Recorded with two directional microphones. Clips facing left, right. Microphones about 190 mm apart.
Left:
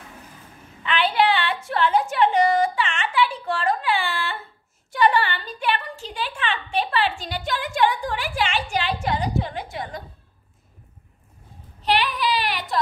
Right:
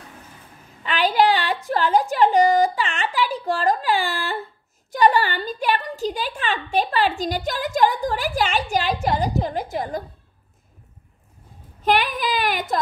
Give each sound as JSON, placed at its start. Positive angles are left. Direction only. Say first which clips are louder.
{"t": 0.8, "sound": "a sound", "louder": "right 2 dB", "side_deg": -40}
{"t": 4.9, "sound": "a woman's voice", "louder": "right 2 dB", "side_deg": -40}
{"t": 11.8, "sound": "speech", "louder": "right 2 dB", "side_deg": -50}